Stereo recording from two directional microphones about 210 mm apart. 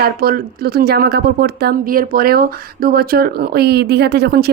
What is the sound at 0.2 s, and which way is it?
Speech, 45° right (ahead or behind).